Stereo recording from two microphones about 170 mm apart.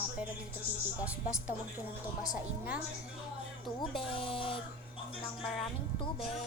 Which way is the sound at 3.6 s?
30° left (ahead or behind).